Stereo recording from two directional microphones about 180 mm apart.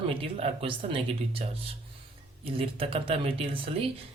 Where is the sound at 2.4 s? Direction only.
30° right (ahead or behind).